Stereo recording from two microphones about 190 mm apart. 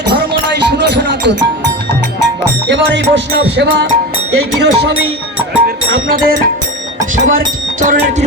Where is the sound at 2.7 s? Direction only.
70° right (ahead or behind).